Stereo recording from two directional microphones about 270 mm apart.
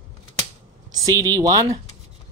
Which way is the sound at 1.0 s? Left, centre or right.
Centre.